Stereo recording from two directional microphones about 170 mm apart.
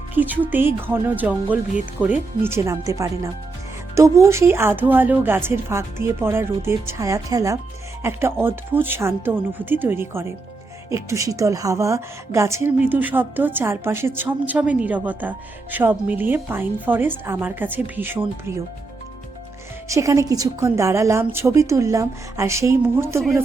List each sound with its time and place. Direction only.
0.1 s speech: 10° right (ahead or behind)
19.9 s speech: 20° right (ahead or behind)